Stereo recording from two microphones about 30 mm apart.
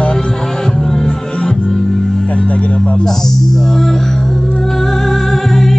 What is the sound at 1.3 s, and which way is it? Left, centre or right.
Music, left.